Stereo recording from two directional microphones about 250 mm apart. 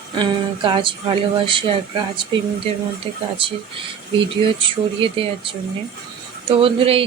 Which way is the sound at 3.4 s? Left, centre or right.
Right.